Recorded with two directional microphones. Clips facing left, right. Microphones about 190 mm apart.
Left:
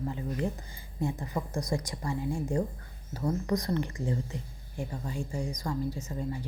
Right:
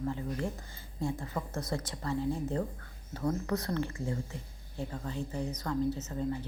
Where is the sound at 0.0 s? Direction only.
15° left (ahead or behind).